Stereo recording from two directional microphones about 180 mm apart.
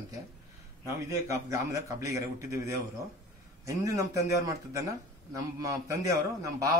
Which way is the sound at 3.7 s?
15° right (ahead or behind).